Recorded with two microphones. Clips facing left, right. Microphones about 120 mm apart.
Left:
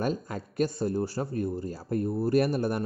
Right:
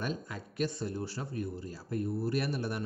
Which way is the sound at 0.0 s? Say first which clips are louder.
Left 7 dB; 45° left (ahead or behind).